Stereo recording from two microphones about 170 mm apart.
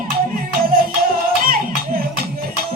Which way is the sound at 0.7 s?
60° right (ahead or behind).